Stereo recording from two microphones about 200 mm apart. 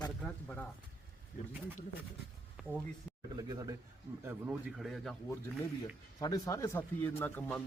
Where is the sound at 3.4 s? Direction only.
20° right (ahead or behind).